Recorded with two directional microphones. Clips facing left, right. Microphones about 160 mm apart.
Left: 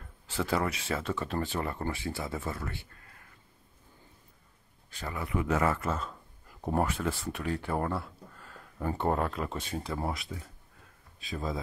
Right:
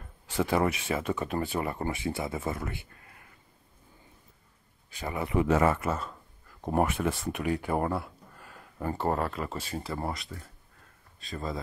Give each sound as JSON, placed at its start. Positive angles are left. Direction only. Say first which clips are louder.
{"t": 0.4, "sound": "speech", "louder": "right 4 dB", "side_deg": -20}
{"t": 4.9, "sound": "speech", "louder": "right 5 dB", "side_deg": -15}
{"t": 5.8, "sound": "speech", "louder": "right 2 dB", "side_deg": -5}
{"t": 6.8, "sound": "speech", "louder": "right 4 dB", "side_deg": -20}